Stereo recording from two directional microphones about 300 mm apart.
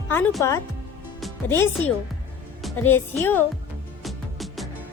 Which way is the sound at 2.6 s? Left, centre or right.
Centre.